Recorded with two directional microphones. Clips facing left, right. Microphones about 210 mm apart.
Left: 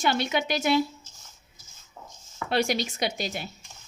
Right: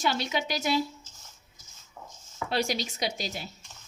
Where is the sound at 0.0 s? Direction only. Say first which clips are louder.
Left 3 dB; 55° left (ahead or behind).